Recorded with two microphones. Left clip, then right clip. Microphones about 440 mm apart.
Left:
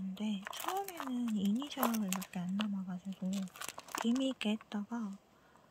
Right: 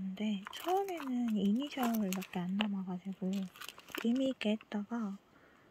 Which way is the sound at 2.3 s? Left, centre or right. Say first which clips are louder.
Right 4 dB; centre.